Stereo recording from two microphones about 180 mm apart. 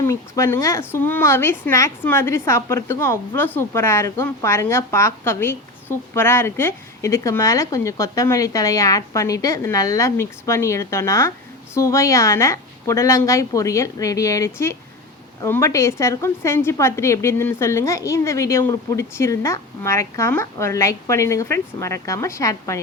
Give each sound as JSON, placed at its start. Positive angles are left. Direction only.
{"t": 0.0, "sound": "a woman's voice", "side_deg": 15}